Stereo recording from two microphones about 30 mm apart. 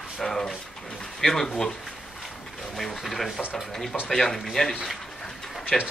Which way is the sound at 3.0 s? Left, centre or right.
Centre.